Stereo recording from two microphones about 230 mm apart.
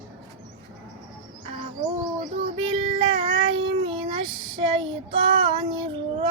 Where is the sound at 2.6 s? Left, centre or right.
Right.